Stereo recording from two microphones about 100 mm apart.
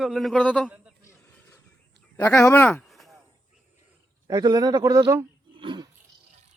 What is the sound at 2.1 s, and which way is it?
Speech, 30° left (ahead or behind).